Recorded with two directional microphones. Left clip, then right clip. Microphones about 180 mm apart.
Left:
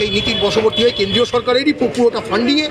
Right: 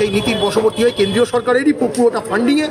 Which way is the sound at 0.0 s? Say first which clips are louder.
Even; 15° right (ahead or behind).